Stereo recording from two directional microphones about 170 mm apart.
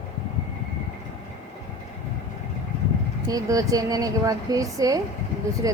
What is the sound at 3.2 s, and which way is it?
A woman's voice, 20° right (ahead or behind).